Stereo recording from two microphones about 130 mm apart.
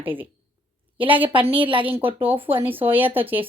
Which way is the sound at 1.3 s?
40° right (ahead or behind).